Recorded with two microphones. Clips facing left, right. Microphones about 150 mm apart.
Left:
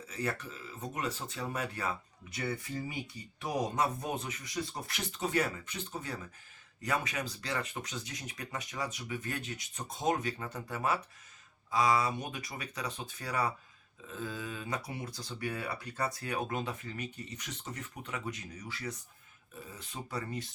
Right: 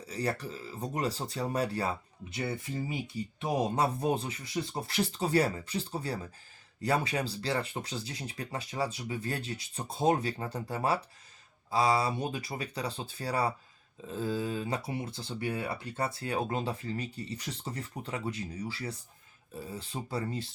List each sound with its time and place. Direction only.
0.0 s speech: 35° right (ahead or behind)